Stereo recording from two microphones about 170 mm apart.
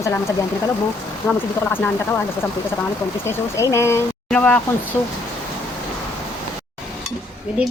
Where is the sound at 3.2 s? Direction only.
15° left (ahead or behind).